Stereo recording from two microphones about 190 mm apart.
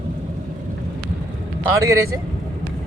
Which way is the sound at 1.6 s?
15° right (ahead or behind).